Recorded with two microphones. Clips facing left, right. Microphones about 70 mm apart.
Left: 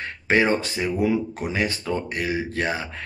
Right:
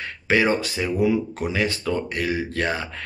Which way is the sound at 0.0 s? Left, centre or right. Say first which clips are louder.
Even; left.